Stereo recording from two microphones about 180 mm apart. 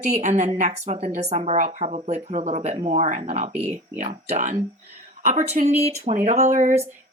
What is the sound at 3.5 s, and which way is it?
Speech, 10° right (ahead or behind).